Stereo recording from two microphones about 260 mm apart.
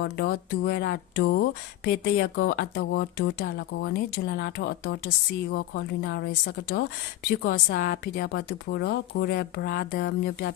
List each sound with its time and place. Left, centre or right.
0.0 s speech: left